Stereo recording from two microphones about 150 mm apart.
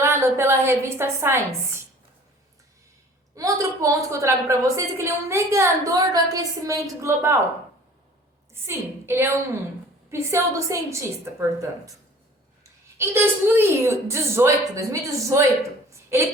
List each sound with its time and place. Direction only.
0.0 s a woman's voice: 15° right (ahead or behind)
3.3 s a woman's voice: 20° right (ahead or behind)
8.6 s a woman's voice: 15° right (ahead or behind)
13.0 s a woman's voice: 15° right (ahead or behind)
15.9 s a sound: 15° right (ahead or behind)